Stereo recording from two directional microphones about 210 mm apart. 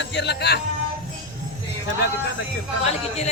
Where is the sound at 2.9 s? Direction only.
30° left (ahead or behind).